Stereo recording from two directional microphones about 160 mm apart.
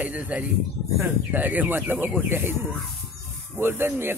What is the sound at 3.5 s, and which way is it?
Speech, 15° right (ahead or behind).